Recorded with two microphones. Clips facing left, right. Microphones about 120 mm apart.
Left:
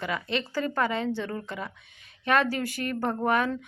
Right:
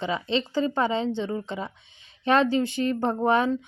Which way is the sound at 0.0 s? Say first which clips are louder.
Right 4 dB; 25° right (ahead or behind).